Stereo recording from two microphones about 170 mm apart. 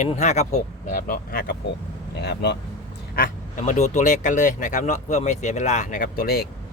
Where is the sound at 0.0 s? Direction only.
40° left (ahead or behind); by 1.5 s 60° left (ahead or behind).